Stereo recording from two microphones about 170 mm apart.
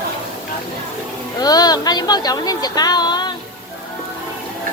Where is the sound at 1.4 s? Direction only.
20° left (ahead or behind).